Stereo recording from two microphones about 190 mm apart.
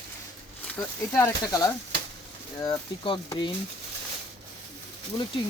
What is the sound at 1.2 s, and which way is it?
Speech, 20° left (ahead or behind).